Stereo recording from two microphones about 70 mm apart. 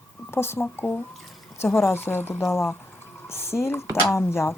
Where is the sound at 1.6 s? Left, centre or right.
Left.